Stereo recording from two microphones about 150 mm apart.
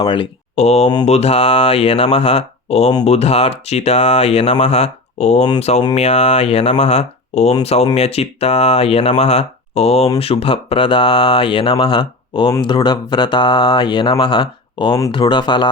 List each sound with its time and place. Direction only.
0.0 s speech: 35° left (ahead or behind)
0.5 s speech: 45° left (ahead or behind); by 15.7 s 30° left (ahead or behind)